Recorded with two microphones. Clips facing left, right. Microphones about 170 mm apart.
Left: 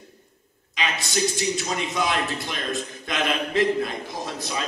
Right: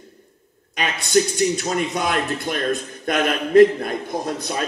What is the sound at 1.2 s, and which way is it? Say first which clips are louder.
A man's voice: right 7 dB; 50° right (ahead or behind).